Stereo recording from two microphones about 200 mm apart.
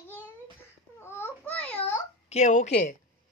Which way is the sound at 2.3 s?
35° left (ahead or behind).